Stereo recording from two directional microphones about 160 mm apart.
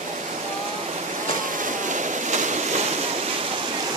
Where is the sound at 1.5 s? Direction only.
55° right (ahead or behind).